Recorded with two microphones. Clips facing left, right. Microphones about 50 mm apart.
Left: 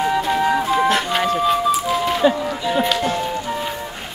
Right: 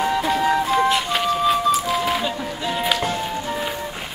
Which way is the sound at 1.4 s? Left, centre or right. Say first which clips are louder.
Left 1 dB; centre.